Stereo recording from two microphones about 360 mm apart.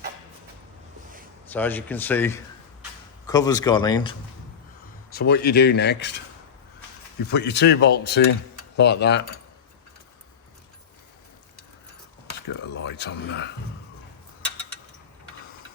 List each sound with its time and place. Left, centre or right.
1.5 s speech: centre
5.1 s speech: left
7.3 s speech: left
12.5 s a sound: left